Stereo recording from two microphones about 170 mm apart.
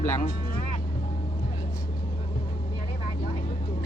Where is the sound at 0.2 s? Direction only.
60° left (ahead or behind).